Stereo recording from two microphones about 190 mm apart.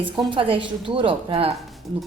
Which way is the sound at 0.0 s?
25° right (ahead or behind).